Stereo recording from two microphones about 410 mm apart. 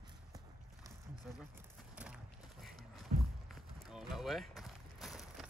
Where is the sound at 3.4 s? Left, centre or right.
Centre.